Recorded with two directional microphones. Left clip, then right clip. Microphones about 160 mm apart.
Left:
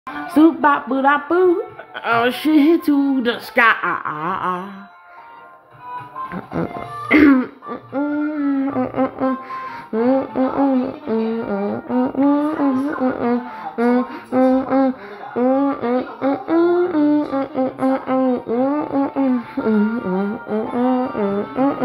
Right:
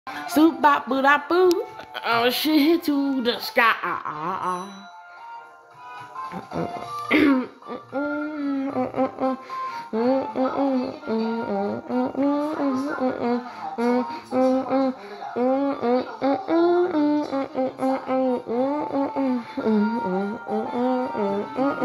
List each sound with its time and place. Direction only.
0.3 s music: 5° right (ahead or behind)
2.0 s speech: 5° right (ahead or behind)
7.1 s music: centre (ahead or behind)
9.9 s speech: 5° right (ahead or behind)
15.3 s a sound: centre (ahead or behind)
15.8 s music: 20° right (ahead or behind)
17.6 s a sound: centre (ahead or behind)
20.5 s music: centre (ahead or behind)